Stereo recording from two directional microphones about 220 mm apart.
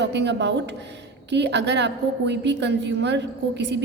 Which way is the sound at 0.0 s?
50° right (ahead or behind).